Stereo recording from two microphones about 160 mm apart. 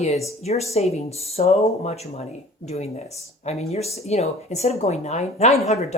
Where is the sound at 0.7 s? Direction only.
40° left (ahead or behind).